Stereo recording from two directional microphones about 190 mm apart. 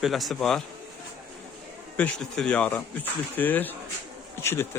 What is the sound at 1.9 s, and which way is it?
Speech, 5° left (ahead or behind).